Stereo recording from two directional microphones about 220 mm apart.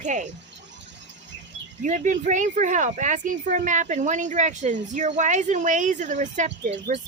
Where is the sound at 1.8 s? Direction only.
35° right (ahead or behind).